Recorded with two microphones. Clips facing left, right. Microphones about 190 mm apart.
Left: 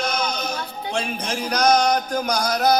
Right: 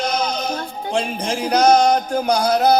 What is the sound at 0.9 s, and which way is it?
Music, 35° right (ahead or behind).